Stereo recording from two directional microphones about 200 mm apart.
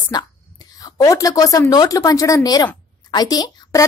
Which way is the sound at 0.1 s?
20° left (ahead or behind).